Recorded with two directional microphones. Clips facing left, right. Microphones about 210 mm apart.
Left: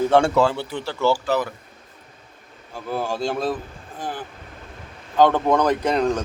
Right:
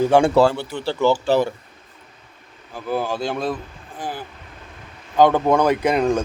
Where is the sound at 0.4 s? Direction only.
40° right (ahead or behind).